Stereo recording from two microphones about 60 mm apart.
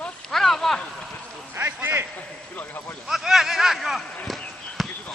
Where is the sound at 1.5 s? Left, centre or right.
Right.